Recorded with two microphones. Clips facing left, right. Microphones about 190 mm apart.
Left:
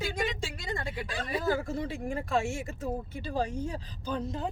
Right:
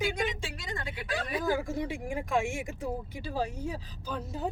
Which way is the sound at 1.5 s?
15° right (ahead or behind).